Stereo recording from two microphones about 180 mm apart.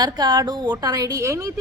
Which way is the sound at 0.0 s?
25° right (ahead or behind).